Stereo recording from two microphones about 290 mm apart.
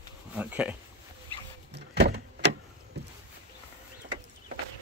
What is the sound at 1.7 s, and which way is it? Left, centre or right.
Power windows, right.